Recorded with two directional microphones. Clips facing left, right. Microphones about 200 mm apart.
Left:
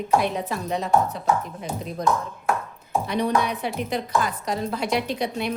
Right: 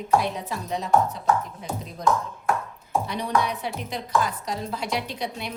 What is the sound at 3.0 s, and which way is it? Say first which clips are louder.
A woman's voice: left 4 dB; 60° left (ahead or behind).